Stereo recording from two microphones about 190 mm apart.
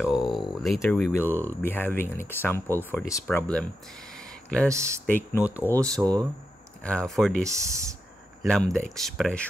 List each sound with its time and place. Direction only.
0.0 s a sound: centre (ahead or behind)
1.2 s speech: 10° right (ahead or behind)
1.5 s speech: 10° left (ahead or behind)
4.6 s speech: 15° right (ahead or behind)
5.0 s speech: 10° left (ahead or behind)
5.9 s speech: 20° right (ahead or behind)
6.8 s speech: 5° left (ahead or behind)
7.4 s speech: 15° right (ahead or behind)
8.4 s speech: centre (ahead or behind)